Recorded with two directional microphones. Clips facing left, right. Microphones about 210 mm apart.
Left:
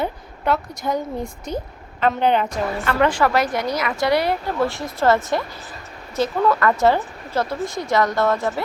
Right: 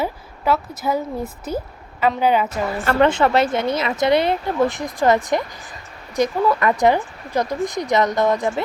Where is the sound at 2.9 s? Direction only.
25° right (ahead or behind).